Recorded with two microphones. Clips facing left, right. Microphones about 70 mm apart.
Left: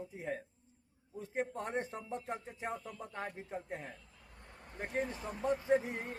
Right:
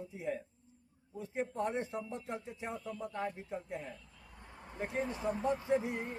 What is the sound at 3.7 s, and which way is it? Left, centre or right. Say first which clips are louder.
Speech: right 1 dB; left.